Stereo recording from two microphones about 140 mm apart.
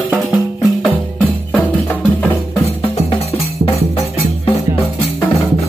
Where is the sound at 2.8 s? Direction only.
40° left (ahead or behind).